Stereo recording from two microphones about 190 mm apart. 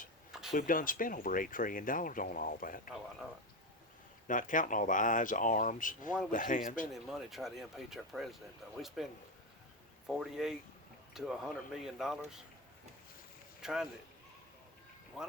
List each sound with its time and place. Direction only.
0.5 s speech: 45° left (ahead or behind)
4.3 s speech: 45° left (ahead or behind)
6.9 s speech: centre (ahead or behind)
13.6 s speech: 5° right (ahead or behind)